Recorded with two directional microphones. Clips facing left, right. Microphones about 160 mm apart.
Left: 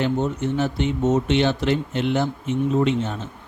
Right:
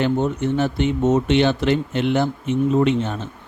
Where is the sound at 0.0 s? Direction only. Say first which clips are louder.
Right 2 dB; 60° right (ahead or behind).